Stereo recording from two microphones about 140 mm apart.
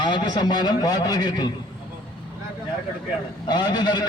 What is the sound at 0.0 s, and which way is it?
A man's voice, 30° left (ahead or behind).